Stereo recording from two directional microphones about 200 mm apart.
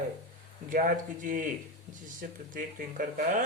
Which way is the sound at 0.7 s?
45° right (ahead or behind).